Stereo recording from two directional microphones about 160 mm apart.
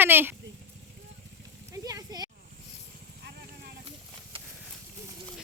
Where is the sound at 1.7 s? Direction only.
20° right (ahead or behind).